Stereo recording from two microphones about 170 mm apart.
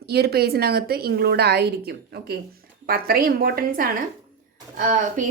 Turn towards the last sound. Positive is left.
turn(degrees=-50)  # may be behind; listen again after turning